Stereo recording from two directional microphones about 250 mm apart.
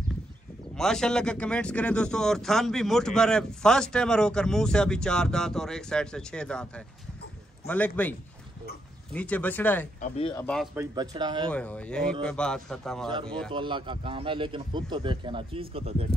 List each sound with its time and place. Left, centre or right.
0.7 s speech: centre
9.9 s speech: left
10.4 s speech: centre
10.8 s speech: centre
11.5 s speech: centre
13.5 s a man's voice: centre